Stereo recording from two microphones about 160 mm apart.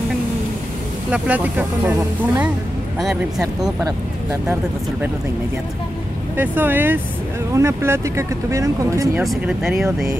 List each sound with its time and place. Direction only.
1.1 s speech: 10° right (ahead or behind)
3.8 s speech: 20° right (ahead or behind)
6.3 s speech: 10° right (ahead or behind)
9.2 s speech: centre (ahead or behind)